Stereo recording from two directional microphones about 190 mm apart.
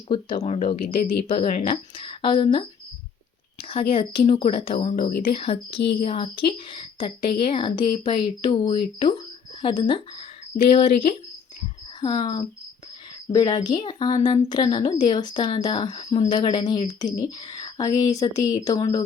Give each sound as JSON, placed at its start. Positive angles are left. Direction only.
{"t": 0.1, "sound": "a woman's voice", "side_deg": 25}
{"t": 11.9, "sound": "a woman's voice", "side_deg": 25}